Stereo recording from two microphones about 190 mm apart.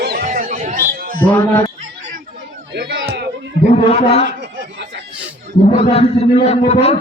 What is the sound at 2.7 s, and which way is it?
Speech, 60° right (ahead or behind).